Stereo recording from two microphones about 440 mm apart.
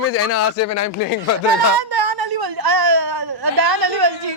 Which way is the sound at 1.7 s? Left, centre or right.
Right.